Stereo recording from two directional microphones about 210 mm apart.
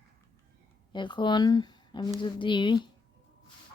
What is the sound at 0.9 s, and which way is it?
Speech, 20° left (ahead or behind).